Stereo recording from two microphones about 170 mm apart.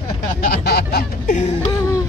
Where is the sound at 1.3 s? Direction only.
45° left (ahead or behind).